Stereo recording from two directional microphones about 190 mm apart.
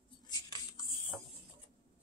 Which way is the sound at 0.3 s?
20° left (ahead or behind).